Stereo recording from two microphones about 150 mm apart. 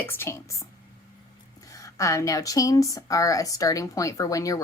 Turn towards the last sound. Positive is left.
turn(degrees=20)  # may be behind; listen again after turning